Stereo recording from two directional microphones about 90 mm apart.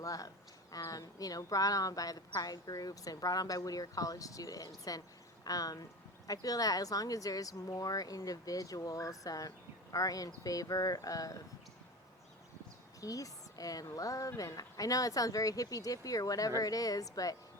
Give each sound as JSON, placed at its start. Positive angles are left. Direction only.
{"t": 0.0, "sound": "a man's voice", "side_deg": 40}
{"t": 13.0, "sound": "a woman's voice", "side_deg": 40}